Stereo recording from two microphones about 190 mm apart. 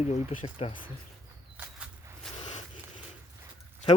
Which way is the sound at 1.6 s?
5° right (ahead or behind).